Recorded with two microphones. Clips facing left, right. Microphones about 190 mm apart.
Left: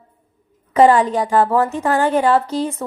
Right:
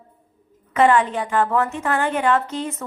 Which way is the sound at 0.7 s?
35° left (ahead or behind).